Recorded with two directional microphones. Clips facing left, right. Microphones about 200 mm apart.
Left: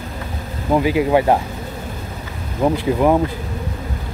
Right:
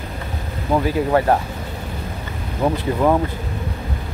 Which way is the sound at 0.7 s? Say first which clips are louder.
Left 2 dB; 10° left (ahead or behind).